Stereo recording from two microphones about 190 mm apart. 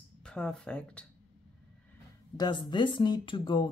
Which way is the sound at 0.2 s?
5° left (ahead or behind).